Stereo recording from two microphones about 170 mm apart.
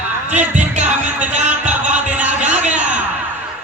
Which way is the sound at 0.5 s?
45° right (ahead or behind).